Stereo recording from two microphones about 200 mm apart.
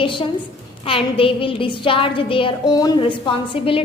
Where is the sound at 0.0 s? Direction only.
25° left (ahead or behind).